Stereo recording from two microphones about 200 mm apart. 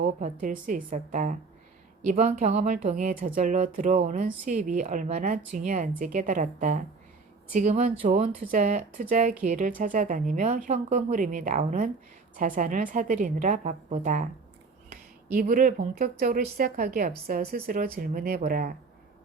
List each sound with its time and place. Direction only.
0.0 s a woman's voice: 40° right (ahead or behind)